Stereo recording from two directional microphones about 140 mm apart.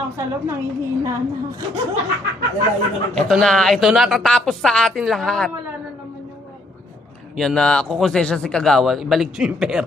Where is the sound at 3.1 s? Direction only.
5° left (ahead or behind).